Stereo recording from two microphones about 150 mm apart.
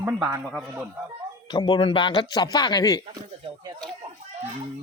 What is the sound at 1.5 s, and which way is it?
Speech, 30° left (ahead or behind).